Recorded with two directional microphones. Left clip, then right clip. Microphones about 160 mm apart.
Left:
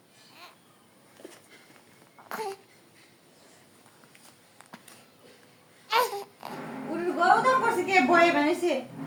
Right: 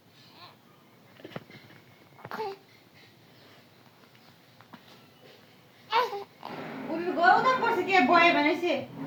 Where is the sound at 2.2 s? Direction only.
20° left (ahead or behind).